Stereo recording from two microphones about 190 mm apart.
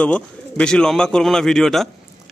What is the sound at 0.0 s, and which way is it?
A man's voice, 5° left (ahead or behind).